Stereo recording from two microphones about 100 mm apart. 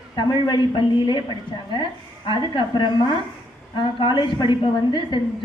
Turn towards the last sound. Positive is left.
turn(degrees=50)  # may be behind; listen again after turning